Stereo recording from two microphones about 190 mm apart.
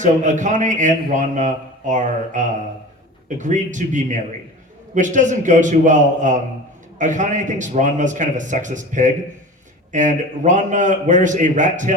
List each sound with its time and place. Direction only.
0.0 s a man's voice: 40° right (ahead or behind)